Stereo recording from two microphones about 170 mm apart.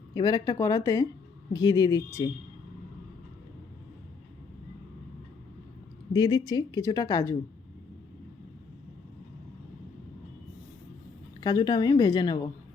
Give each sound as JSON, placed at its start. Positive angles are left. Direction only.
{"t": 0.1, "sound": "speech", "side_deg": 25}
{"t": 6.1, "sound": "speech", "side_deg": 25}
{"t": 11.3, "sound": "speech", "side_deg": 25}